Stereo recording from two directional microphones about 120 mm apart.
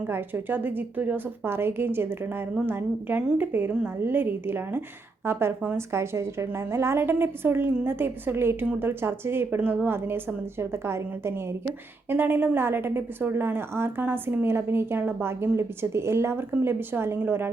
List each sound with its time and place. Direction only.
0.1 s a woman's voice: 15° right (ahead or behind)